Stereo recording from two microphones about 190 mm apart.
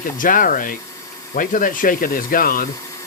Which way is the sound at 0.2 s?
45° left (ahead or behind).